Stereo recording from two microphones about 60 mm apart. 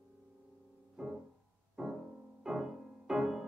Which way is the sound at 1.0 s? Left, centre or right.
Centre.